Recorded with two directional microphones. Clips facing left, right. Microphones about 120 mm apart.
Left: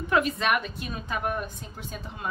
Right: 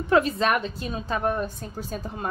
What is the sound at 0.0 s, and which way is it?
A woman's voice, 30° right (ahead or behind).